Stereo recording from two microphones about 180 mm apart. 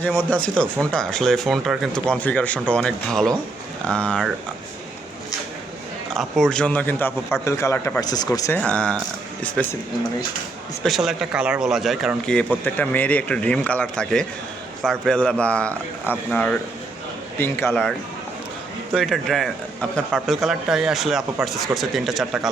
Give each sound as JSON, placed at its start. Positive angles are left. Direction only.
{"t": 0.0, "sound": "a man's voice", "side_deg": 5}
{"t": 6.1, "sound": "a man's voice", "side_deg": 0}
{"t": 10.8, "sound": "a man's voice", "side_deg": 0}
{"t": 18.9, "sound": "a man's voice", "side_deg": 0}